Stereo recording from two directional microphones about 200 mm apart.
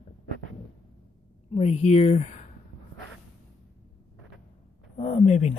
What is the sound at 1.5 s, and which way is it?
Speech, 30° left (ahead or behind).